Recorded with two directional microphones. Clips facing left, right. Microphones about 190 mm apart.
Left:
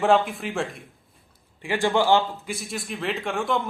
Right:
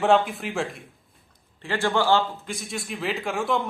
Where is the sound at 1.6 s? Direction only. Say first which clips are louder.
Left 2 dB; 15° left (ahead or behind).